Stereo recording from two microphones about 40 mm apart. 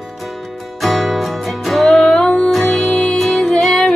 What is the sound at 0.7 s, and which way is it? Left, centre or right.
Music, centre.